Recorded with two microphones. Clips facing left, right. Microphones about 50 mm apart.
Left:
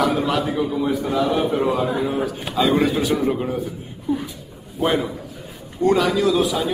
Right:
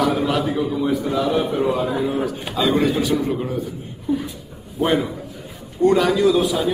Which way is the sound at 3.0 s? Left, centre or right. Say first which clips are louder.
Even; centre.